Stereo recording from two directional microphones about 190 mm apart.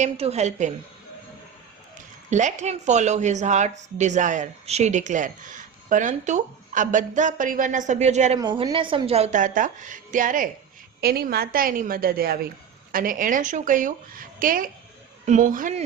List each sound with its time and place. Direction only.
0.0 s a woman's voice: 35° right (ahead or behind)
2.3 s a woman's voice: 40° right (ahead or behind)
8.4 s a woman's voice: 20° right (ahead or behind); by 10.5 s 45° right (ahead or behind)
11.0 s speech: 55° right (ahead or behind)